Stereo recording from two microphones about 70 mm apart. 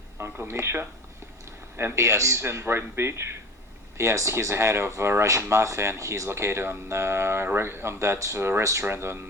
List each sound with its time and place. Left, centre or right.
0.3 s speech: right